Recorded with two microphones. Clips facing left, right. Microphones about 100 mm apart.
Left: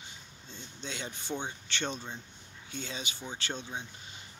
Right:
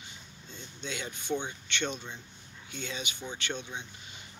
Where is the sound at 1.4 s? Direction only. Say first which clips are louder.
Right 1 dB; 35° left (ahead or behind).